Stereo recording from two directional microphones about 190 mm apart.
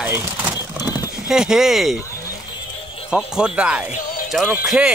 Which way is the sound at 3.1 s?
5° right (ahead or behind).